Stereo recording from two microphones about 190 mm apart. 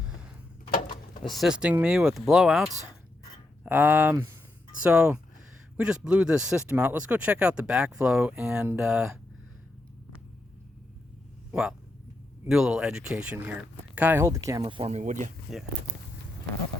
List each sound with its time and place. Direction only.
1.2 s speech: centre (ahead or behind)
12.5 s speech: 5° right (ahead or behind)
14.6 s speech: 25° right (ahead or behind)
15.5 s speech: centre (ahead or behind)